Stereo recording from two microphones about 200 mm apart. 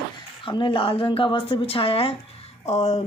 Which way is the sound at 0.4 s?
25° left (ahead or behind).